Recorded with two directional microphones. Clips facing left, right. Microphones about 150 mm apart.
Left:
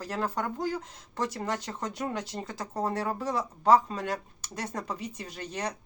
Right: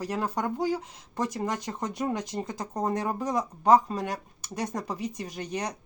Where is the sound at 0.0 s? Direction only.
10° right (ahead or behind).